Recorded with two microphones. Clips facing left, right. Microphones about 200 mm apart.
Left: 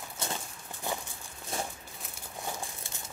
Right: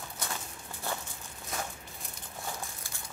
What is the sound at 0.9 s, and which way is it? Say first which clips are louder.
Walk: left 2 dB; 15° left (ahead or behind).